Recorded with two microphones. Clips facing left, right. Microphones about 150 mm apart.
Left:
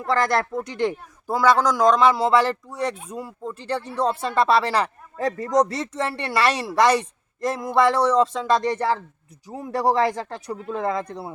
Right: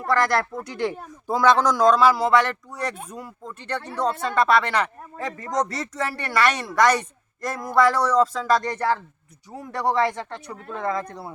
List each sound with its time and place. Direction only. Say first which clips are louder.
0.1 s speech: even; 25° left (ahead or behind)
1.3 s speech: even; 10° left (ahead or behind); by 8.9 s 25° left (ahead or behind)
9.7 s speech: left 2 dB; 35° left (ahead or behind)